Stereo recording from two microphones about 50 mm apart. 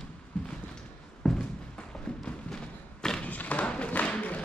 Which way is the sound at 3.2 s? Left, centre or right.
Left.